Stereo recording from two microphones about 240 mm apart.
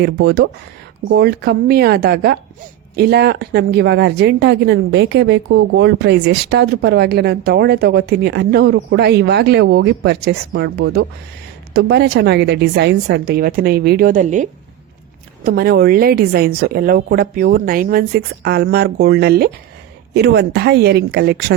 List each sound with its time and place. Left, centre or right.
0.0 s a woman's voice: right
15.4 s a woman's voice: right